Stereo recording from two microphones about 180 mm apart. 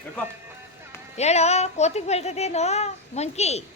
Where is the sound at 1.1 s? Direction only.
35° left (ahead or behind).